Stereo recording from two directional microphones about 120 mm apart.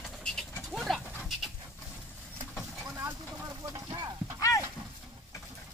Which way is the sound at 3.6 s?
30° right (ahead or behind).